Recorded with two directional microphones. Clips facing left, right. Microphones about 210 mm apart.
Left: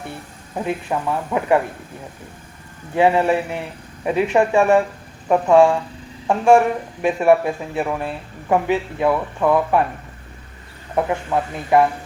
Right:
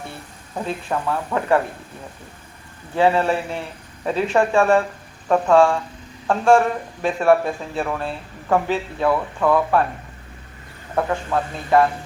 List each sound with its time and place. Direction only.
0.5 s speech: 15° left (ahead or behind)
2.9 s speech: 15° left (ahead or behind)
10.9 s speech: 15° left (ahead or behind)